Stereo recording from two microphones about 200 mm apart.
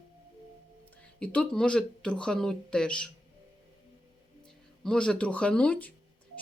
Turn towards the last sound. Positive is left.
turn(degrees=5)  # may be behind; listen again after turning